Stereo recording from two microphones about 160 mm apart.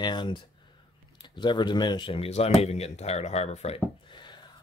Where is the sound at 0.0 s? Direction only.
30° left (ahead or behind).